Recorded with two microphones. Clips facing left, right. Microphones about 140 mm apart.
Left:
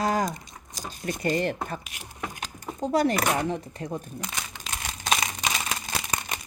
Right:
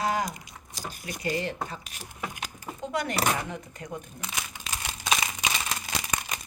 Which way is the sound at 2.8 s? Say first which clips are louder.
Left 5 dB; 35° left (ahead or behind).